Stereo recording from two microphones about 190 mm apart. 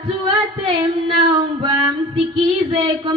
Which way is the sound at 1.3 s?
25° right (ahead or behind).